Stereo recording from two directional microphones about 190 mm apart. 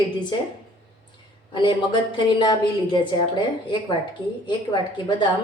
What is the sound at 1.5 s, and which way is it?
A woman's voice, 25° left (ahead or behind).